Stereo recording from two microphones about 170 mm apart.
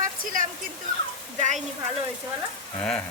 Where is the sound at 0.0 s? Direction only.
55° right (ahead or behind).